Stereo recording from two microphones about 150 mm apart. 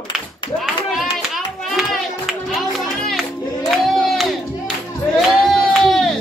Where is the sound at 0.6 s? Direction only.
Centre (ahead or behind).